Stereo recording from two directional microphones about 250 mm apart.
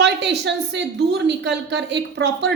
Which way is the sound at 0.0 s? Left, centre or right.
Right.